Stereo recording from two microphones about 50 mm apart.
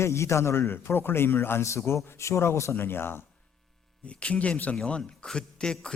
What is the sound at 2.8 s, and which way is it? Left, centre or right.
Speech, left.